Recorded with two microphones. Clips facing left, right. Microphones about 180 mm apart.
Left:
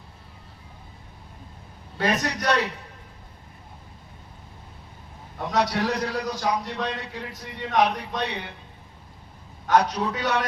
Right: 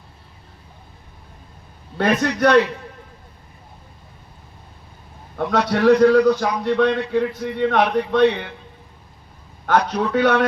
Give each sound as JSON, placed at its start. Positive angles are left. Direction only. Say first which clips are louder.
{"t": 2.0, "sound": "speech", "louder": "right 7 dB", "side_deg": -55}
{"t": 5.4, "sound": "speech", "louder": "right 6 dB", "side_deg": -60}
{"t": 9.6, "sound": "speech", "louder": "right 2 dB", "side_deg": -60}